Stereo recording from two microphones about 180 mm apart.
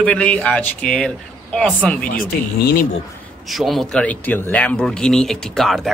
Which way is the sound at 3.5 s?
Centre (ahead or behind).